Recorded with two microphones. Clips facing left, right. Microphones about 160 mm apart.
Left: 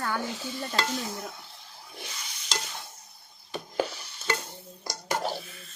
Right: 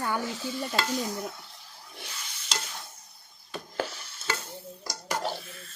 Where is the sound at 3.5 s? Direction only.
15° left (ahead or behind).